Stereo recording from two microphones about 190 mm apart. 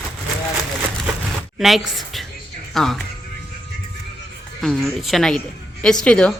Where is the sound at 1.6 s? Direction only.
Centre (ahead or behind).